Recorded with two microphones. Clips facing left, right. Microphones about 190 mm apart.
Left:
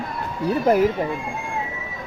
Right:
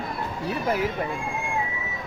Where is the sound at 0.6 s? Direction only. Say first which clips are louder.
Left 9 dB; 45° left (ahead or behind).